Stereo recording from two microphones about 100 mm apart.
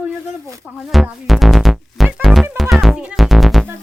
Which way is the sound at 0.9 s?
Centre (ahead or behind).